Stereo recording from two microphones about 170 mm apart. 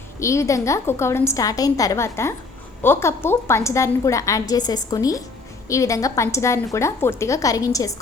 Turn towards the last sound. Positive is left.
turn(degrees=20)  # may be behind; listen again after turning